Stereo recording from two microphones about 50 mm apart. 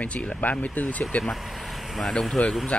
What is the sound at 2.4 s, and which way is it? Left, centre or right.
Speech, left.